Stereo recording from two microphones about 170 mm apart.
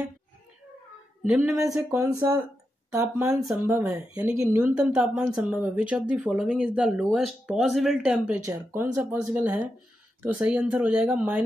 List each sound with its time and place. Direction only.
1.2 s speech: 5° right (ahead or behind)
1.9 s speech: 15° right (ahead or behind)
8.5 s speech: 15° right (ahead or behind)